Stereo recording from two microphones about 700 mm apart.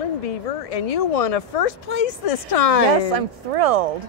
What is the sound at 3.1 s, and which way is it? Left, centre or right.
Speech, right.